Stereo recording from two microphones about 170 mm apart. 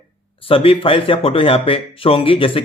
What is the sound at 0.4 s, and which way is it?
Speech, 35° left (ahead or behind).